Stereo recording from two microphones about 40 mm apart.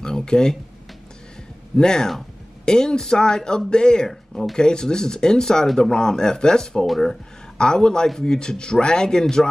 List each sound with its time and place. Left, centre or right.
0.0 s speech: centre
1.8 s speech: centre